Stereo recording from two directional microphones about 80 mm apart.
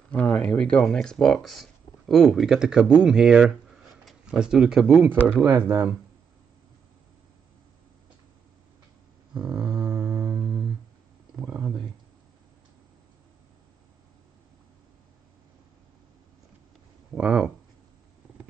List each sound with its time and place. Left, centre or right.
0.1 s speech: centre
5.4 s speech: right
9.4 s a sound: right
9.8 s music: right
17.1 s speech: centre